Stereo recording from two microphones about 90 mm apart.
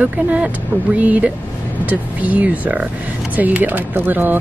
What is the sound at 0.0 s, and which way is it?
A woman's voice, 15° right (ahead or behind).